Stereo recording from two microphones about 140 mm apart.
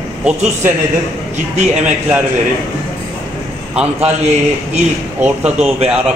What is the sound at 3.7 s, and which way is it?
Speech, 5° right (ahead or behind).